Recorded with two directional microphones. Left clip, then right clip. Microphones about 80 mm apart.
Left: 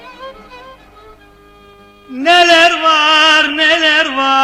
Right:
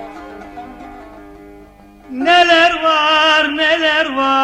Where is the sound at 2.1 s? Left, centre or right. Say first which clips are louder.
Left 2 dB; left.